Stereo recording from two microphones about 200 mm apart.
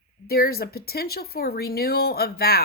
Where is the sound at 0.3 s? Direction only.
50° left (ahead or behind).